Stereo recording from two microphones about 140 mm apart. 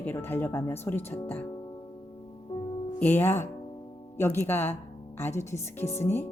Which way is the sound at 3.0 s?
15° left (ahead or behind).